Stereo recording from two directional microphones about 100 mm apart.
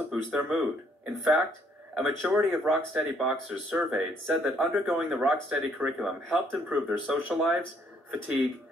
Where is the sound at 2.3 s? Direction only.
10° right (ahead or behind).